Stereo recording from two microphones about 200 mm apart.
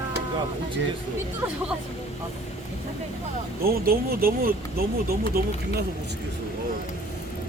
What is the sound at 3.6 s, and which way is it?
Speech, 45° right (ahead or behind).